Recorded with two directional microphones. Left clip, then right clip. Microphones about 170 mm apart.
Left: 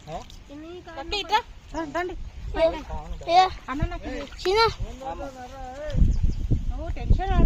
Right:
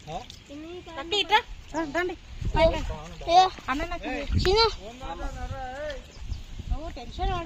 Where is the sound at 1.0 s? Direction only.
40° right (ahead or behind); by 2.2 s 55° right (ahead or behind).